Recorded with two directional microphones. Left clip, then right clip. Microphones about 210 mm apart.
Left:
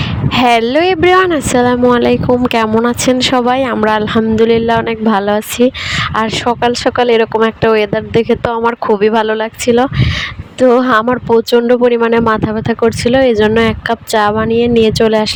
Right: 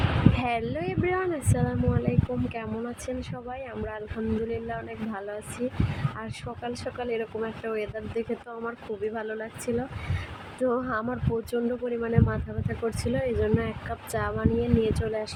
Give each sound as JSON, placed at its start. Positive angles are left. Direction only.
{"t": 0.3, "sound": "speech", "side_deg": 45}